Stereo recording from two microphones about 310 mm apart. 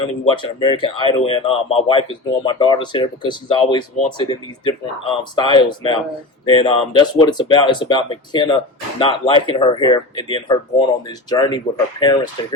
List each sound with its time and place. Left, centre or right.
0.3 s speech: centre